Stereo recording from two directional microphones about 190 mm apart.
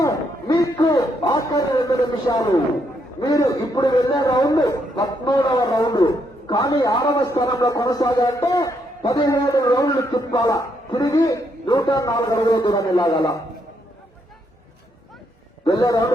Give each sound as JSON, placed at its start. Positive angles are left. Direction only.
{"t": 0.0, "sound": "a sound", "side_deg": 15}
{"t": 3.2, "sound": "a man's voice", "side_deg": 20}
{"t": 15.6, "sound": "a man's voice", "side_deg": 20}